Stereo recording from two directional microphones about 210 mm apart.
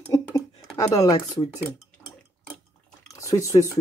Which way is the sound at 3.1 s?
15° left (ahead or behind).